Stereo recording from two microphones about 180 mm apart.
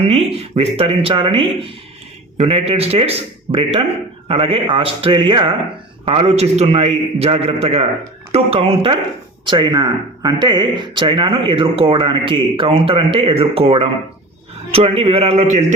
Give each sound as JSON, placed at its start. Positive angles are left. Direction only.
{"t": 0.0, "sound": "a man's voice", "side_deg": -35}